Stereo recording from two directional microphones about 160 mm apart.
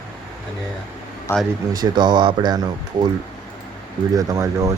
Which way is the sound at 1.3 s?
15° left (ahead or behind).